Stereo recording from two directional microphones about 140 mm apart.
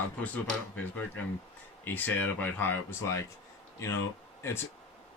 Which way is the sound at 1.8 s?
15° left (ahead or behind).